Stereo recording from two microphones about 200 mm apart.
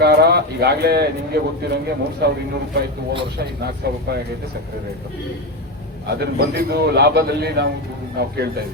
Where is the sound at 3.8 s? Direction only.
55° right (ahead or behind).